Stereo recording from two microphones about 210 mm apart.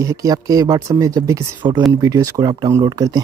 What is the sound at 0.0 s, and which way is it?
A man's voice, 15° right (ahead or behind).